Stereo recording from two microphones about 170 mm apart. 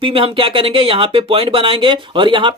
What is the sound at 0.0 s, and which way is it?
Speech, 30° right (ahead or behind).